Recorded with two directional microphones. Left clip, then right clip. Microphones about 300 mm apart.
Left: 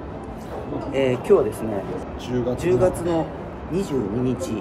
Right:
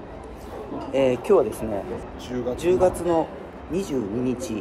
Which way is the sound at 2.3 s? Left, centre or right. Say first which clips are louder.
Left 1 dB; centre.